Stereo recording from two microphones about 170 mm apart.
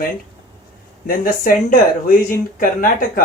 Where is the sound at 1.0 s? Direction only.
55° left (ahead or behind).